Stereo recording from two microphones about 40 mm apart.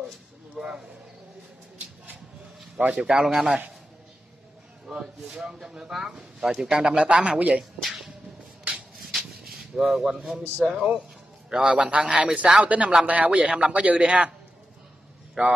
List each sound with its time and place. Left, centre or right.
0.6 s speech: centre
2.8 s speech: right
3.1 s speech: centre
4.8 s speech: centre
8.9 s a sound: centre
10.6 s speech: centre
12.6 s speech: right
13.5 s a man's voice: centre
13.8 s speech: right
15.4 s a man's voice: right